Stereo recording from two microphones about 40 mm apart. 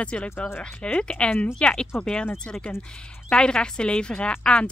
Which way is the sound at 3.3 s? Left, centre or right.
Left.